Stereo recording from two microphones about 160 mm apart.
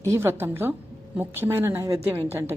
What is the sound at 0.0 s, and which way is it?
A woman's voice, 15° right (ahead or behind).